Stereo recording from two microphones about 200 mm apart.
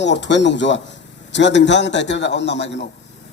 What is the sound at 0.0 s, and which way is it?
A man's voice, 60° left (ahead or behind).